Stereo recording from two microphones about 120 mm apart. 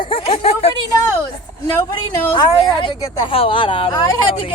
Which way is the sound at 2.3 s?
40° left (ahead or behind).